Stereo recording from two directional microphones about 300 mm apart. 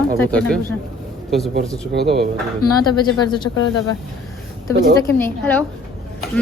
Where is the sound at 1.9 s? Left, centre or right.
Right.